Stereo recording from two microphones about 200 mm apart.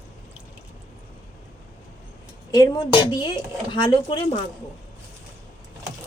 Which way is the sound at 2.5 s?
20° left (ahead or behind).